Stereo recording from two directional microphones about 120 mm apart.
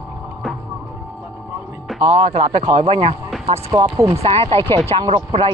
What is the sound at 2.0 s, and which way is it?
Speech, 60° right (ahead or behind).